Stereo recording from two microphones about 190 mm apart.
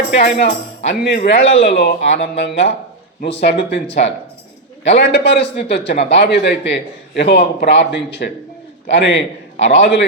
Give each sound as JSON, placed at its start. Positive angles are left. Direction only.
{"t": 0.2, "sound": "speech", "side_deg": 35}
{"t": 1.0, "sound": "a man's voice", "side_deg": 60}